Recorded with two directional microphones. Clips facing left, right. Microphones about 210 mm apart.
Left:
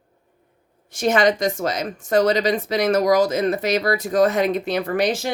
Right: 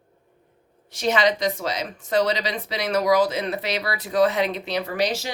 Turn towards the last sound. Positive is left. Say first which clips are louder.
# left 4 dB
turn(degrees=50)  # may be behind; listen again after turning